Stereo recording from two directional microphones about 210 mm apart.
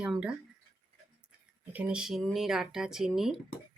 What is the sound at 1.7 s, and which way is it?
Speech, 5° right (ahead or behind).